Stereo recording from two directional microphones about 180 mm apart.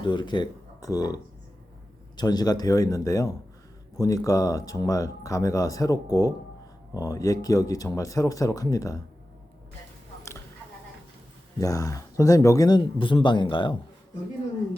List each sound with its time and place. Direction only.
0.0 s speech: 25° left (ahead or behind)
11.6 s speech: 20° left (ahead or behind)